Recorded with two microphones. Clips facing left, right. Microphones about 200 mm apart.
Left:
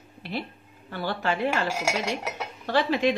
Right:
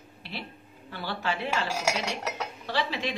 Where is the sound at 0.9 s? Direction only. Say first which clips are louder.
Left 4 dB; 50° left (ahead or behind).